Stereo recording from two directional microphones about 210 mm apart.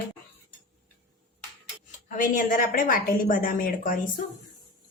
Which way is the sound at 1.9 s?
40° left (ahead or behind).